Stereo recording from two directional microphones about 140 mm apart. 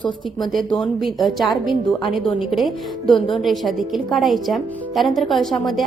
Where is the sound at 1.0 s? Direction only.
Centre (ahead or behind).